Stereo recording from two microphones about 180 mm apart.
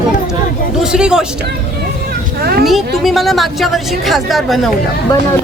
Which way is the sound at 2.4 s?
60° right (ahead or behind).